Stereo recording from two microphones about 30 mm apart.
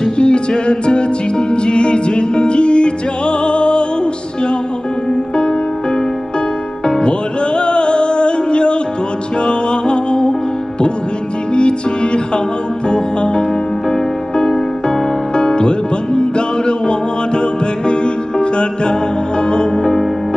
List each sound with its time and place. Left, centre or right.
0.2 s music: left
7.0 s music: left
11.5 s music: left
19.8 s music: centre